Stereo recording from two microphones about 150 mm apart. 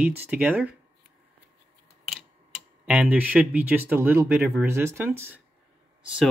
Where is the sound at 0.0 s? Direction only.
10° right (ahead or behind).